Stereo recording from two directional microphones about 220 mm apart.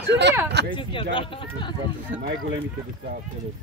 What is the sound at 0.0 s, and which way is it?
Speech, 50° right (ahead or behind).